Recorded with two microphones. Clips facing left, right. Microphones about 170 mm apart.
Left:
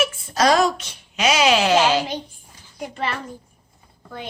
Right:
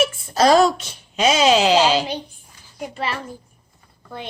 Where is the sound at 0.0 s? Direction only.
30° right (ahead or behind).